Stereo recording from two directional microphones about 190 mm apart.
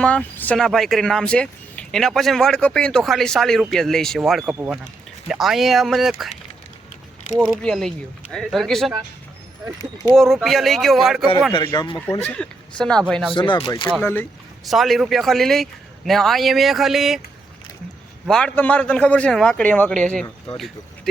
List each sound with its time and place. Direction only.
0.0 s speech: 5° left (ahead or behind)
7.3 s speech: 5° left (ahead or behind)
9.6 s speech: 20° right (ahead or behind)
10.2 s speech: centre (ahead or behind)
11.5 s speech: 25° left (ahead or behind)
12.1 s speech: 10° left (ahead or behind)
13.3 s speech: 25° left (ahead or behind)
14.0 s a man's voice: 10° left (ahead or behind)
14.6 s speech: centre (ahead or behind)
18.3 s a man's voice: 5° left (ahead or behind)